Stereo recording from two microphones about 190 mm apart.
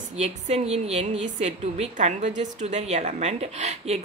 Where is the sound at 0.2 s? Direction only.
35° right (ahead or behind).